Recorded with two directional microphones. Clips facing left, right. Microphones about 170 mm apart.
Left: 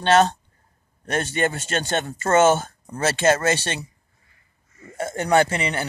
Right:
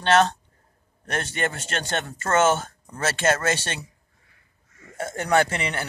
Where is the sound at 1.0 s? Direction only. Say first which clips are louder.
Left 4 dB; 5° left (ahead or behind).